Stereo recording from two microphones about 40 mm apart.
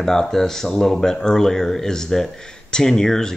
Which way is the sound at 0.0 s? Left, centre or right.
Centre.